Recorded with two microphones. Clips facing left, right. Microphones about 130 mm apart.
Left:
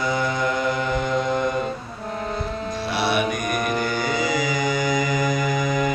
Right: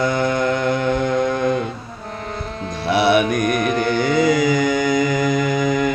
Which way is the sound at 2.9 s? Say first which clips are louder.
Right 8 dB; 60° right (ahead or behind).